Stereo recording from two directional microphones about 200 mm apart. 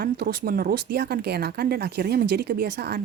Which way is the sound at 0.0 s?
50° right (ahead or behind).